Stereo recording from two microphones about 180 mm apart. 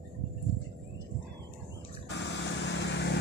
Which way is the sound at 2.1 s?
75° left (ahead or behind).